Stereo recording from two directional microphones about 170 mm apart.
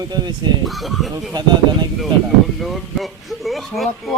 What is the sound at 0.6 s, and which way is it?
Speech, centre (ahead or behind).